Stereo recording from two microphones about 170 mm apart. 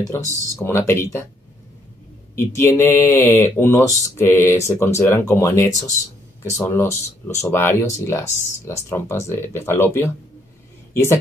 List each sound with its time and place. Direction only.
0.1 s speech: 15° left (ahead or behind)
2.3 s speech: 15° left (ahead or behind)